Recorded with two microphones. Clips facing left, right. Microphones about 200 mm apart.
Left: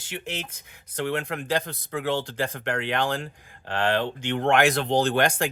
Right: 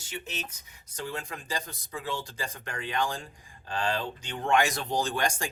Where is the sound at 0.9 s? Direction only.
65° left (ahead or behind).